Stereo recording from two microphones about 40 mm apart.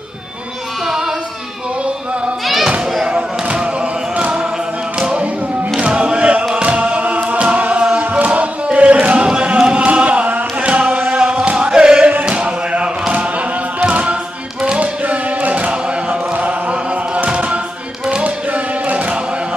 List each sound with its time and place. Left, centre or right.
0.8 s singing: centre
2.4 s thump: centre
3.1 s basketball bounce: right
4.2 s choir: right
5.8 s choir: right
6.4 s chant: right
11.5 s choir: right
12.3 s a sound: right
13.8 s a capella: right
14.8 s music: right
16.3 s chant: right
18.2 s music: right